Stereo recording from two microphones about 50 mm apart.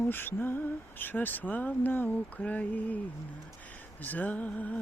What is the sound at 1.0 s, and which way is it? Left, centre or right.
Music, left.